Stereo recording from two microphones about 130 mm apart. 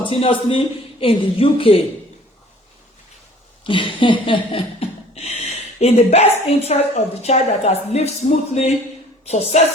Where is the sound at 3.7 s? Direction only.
40° left (ahead or behind).